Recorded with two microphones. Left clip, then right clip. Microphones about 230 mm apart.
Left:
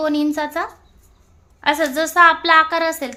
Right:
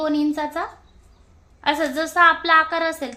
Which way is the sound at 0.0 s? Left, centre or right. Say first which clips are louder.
Left 2 dB; centre.